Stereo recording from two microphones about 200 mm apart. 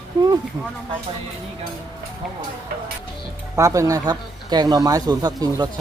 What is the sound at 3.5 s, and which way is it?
Speech, 15° right (ahead or behind).